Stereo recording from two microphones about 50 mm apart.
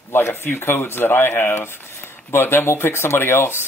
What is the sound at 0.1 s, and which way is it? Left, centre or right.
Speech, left.